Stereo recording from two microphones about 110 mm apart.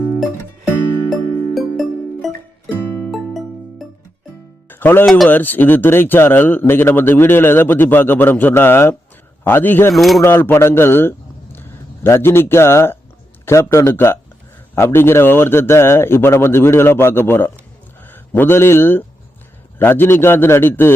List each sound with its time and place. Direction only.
1.1 s music: centre (ahead or behind)
4.7 s music: 20° left (ahead or behind)
5.0 s speech: centre (ahead or behind)
5.3 s a man's voice: 15° left (ahead or behind)
9.9 s speech: centre (ahead or behind)
10.2 s a man's voice: 20° left (ahead or behind)